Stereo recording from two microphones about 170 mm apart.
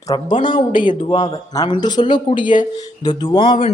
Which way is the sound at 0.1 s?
25° left (ahead or behind).